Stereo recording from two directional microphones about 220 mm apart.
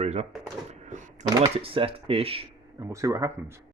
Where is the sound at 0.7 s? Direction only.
35° right (ahead or behind).